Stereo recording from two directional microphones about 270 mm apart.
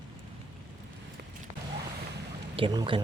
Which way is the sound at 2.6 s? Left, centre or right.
Centre.